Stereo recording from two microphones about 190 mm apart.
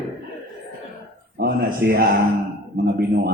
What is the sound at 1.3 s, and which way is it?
A man's voice, 55° right (ahead or behind).